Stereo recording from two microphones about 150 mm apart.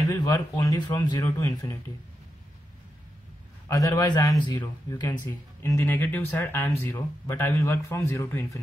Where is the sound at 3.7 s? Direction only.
25° left (ahead or behind).